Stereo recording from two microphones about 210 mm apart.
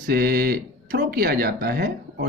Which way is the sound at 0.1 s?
50° right (ahead or behind).